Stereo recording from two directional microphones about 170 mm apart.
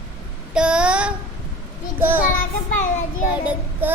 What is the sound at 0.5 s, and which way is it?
Child singing, 5° right (ahead or behind).